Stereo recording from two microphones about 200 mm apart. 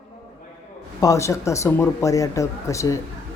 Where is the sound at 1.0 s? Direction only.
15° left (ahead or behind).